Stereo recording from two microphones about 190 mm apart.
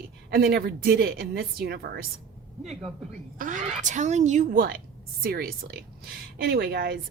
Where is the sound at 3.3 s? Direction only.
45° right (ahead or behind).